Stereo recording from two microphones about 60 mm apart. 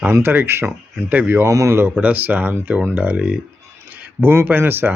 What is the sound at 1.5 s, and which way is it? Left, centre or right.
Speech, right.